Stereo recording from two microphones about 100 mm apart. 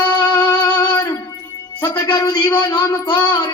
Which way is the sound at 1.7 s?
40° left (ahead or behind).